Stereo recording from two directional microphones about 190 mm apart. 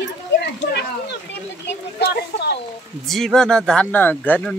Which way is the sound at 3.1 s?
Centre (ahead or behind).